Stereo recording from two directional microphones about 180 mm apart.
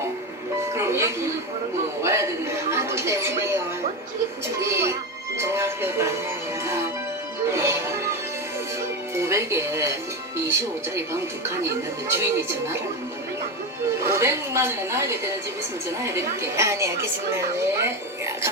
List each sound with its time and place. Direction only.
0.7 s a woman's voice: 15° right (ahead or behind)
4.6 s speech: 15° right (ahead or behind)
7.5 s speech: 15° right (ahead or behind)
9.1 s speech: 15° right (ahead or behind)
14.1 s speech: 15° right (ahead or behind)